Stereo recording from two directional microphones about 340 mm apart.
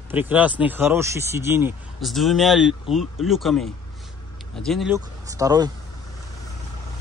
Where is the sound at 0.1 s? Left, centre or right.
Centre.